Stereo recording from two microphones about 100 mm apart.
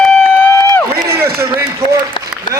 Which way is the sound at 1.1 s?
25° right (ahead or behind).